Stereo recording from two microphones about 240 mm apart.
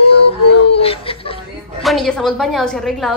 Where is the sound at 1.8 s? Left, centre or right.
Centre.